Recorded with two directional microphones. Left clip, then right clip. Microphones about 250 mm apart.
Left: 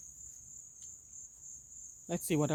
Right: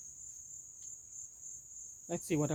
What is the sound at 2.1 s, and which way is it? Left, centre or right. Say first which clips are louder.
Speech: left 2 dB; left.